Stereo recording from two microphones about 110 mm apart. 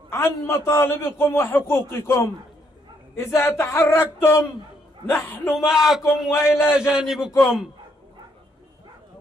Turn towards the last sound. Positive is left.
turn(degrees=-5)  # may be behind; listen again after turning